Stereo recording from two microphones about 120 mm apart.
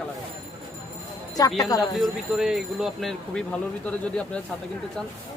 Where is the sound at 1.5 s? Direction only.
30° left (ahead or behind).